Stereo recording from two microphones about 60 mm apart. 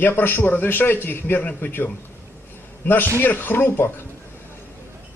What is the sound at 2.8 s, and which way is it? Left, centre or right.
A man's voice, left.